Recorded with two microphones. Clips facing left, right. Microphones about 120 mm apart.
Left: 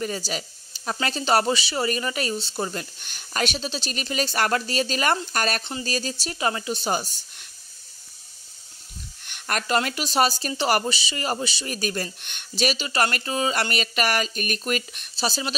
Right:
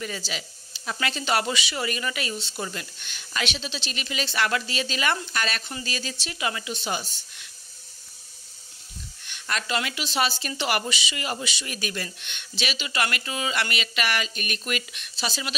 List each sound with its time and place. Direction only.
0.0 s speech: 40° left (ahead or behind)
5.6 s speech: 25° left (ahead or behind)
5.9 s speech: 40° left (ahead or behind)
9.2 s speech: 50° left (ahead or behind); by 15.5 s 35° left (ahead or behind)